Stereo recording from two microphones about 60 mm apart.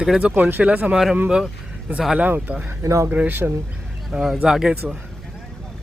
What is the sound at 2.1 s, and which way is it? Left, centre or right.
Speech, right.